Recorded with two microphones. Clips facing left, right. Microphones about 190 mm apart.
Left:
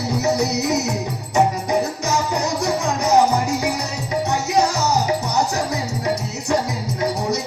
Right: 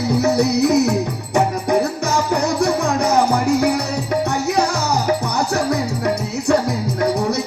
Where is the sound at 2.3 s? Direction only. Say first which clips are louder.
Right 4 dB; 55° right (ahead or behind).